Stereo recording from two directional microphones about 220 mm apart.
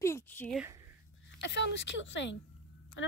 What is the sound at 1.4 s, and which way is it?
A woman's voice, 50° left (ahead or behind).